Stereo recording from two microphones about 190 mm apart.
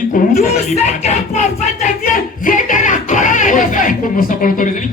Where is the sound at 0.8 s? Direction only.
40° left (ahead or behind).